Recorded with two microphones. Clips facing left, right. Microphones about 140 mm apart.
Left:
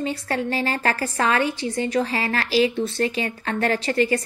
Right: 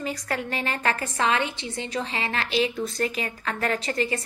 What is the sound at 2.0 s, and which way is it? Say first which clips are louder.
A woman's voice: left 5 dB; 40° left (ahead or behind).